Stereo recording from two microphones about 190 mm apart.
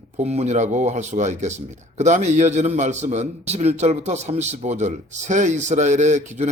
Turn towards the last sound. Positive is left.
turn(degrees=-40)  # may be behind; listen again after turning